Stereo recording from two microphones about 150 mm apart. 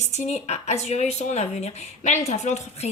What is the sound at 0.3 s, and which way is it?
A woman's voice, 50° left (ahead or behind).